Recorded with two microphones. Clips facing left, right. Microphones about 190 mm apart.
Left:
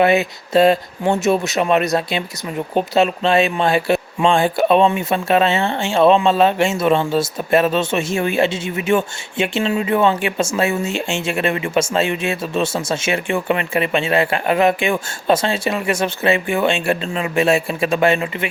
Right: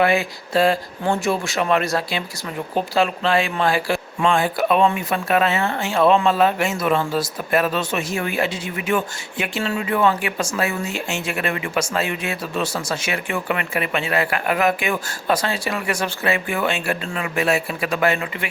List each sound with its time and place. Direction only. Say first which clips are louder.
0.0 s speech: left 4 dB; 20° left (ahead or behind)